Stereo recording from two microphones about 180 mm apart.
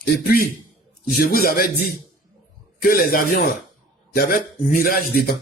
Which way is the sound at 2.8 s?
50° left (ahead or behind).